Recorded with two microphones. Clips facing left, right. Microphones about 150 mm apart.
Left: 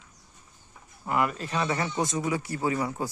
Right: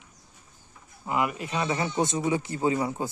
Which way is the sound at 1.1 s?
15° right (ahead or behind).